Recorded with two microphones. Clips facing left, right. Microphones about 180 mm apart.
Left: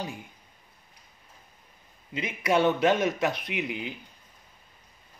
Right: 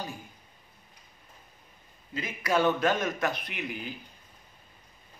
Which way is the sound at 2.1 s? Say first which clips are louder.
Left 3 dB; 20° left (ahead or behind).